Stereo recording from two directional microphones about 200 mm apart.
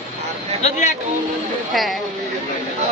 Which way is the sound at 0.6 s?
35° left (ahead or behind).